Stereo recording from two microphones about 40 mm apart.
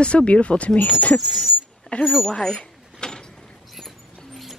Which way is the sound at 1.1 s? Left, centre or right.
Centre.